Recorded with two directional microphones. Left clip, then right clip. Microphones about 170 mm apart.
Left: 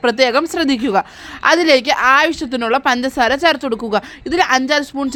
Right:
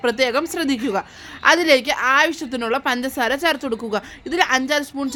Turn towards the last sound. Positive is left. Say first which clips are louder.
# left 5 dB
turn(degrees=25)  # may be behind; listen again after turning